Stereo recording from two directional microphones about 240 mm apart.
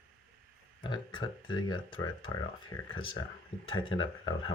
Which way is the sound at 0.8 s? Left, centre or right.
Centre.